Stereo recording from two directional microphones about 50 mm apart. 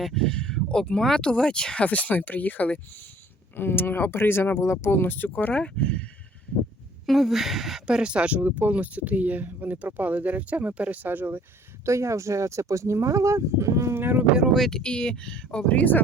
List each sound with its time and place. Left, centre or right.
0.0 s speech: centre; by 2.8 s left
3.5 s speech: left
4.5 s speech: left
4.9 s speech: left
5.5 s speech: left
7.0 s speech: centre
7.9 s speech: centre; by 11.4 s right
11.9 s speech: right
13.9 s speech: right
14.5 s speech: centre
14.8 s speech: centre